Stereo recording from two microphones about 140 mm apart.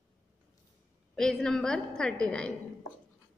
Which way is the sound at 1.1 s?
Centre (ahead or behind).